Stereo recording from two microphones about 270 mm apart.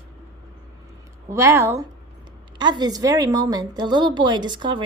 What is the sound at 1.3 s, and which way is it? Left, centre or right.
A woman's voice, centre.